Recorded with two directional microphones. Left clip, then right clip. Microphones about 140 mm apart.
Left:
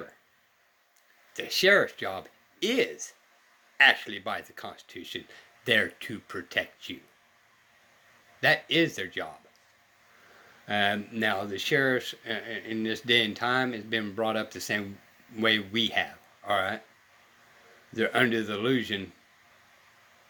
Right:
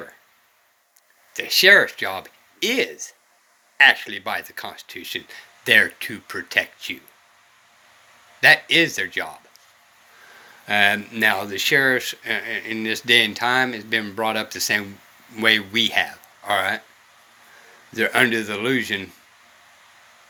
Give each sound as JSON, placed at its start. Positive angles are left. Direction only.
{"t": 1.3, "sound": "speech", "side_deg": 45}
{"t": 8.4, "sound": "speech", "side_deg": 45}
{"t": 10.7, "sound": "speech", "side_deg": 40}
{"t": 17.9, "sound": "speech", "side_deg": 40}